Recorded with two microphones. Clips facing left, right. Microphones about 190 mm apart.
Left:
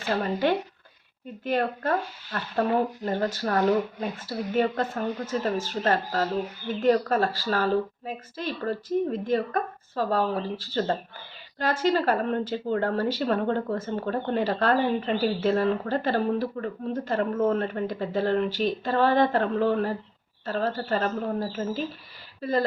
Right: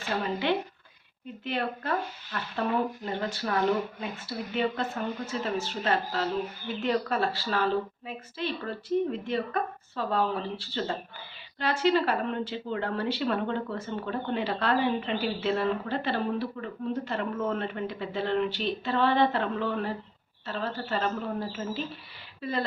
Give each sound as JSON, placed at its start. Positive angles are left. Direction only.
{"t": 0.2, "sound": "speech", "side_deg": 45}